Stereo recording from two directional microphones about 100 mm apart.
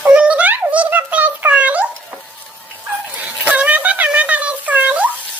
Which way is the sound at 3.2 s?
15° right (ahead or behind).